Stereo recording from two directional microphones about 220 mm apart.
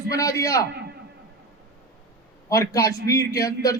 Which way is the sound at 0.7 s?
50° right (ahead or behind).